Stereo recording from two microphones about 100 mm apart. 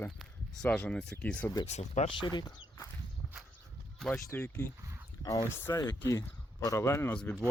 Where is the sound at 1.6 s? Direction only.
75° left (ahead or behind).